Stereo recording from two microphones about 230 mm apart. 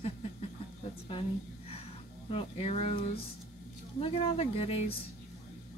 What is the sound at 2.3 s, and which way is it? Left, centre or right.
Speech, left.